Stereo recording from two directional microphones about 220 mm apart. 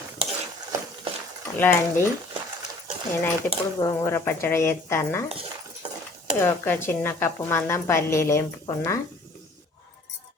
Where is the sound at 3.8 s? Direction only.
15° left (ahead or behind).